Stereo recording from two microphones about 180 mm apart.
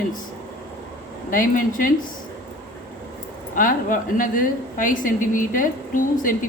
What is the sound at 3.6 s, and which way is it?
A woman's voice, 50° left (ahead or behind).